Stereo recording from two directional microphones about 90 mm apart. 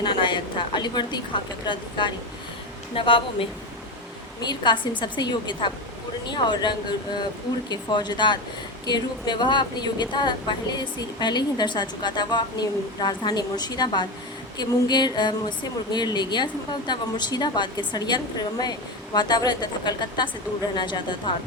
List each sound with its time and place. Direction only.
0.0 s a sound: 60° left (ahead or behind)
1.6 s a woman's voice: 60° left (ahead or behind)
2.9 s a woman's voice: 75° left (ahead or behind)
4.4 s a woman's voice: 55° left (ahead or behind)